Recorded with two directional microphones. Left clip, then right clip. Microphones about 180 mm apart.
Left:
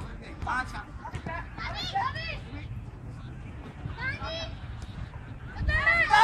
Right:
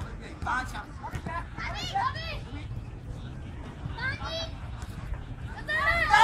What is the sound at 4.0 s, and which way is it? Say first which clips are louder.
Children playing: right 1 dB; 10° left (ahead or behind).